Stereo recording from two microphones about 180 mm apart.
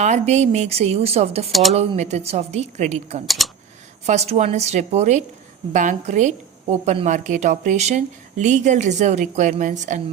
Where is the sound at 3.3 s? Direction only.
Centre (ahead or behind).